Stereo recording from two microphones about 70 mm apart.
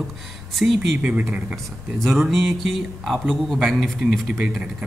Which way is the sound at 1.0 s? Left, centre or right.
Centre.